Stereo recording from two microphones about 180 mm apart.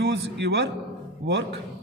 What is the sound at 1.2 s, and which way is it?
Speech, 85° right.